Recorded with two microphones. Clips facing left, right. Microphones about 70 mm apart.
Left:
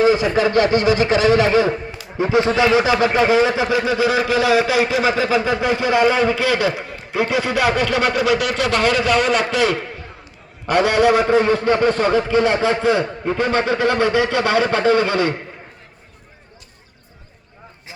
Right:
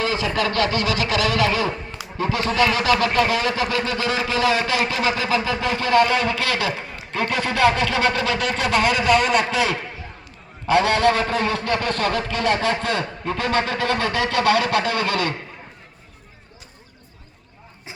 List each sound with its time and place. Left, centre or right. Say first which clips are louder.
0.0 s speech: left 7 dB; centre
5.5 s speech: left 3 dB; centre
10.8 s speech: left 4 dB; centre